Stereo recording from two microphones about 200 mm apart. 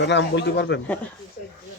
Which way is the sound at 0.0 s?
60° left (ahead or behind).